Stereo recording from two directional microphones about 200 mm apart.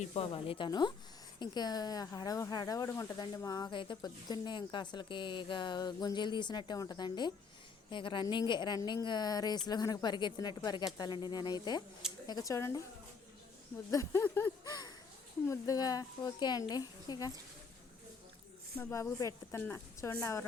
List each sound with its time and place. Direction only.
0.0 s a woman's voice: 30° left (ahead or behind)
13.9 s a woman's voice: 15° left (ahead or behind)
18.8 s a woman's voice: 15° left (ahead or behind)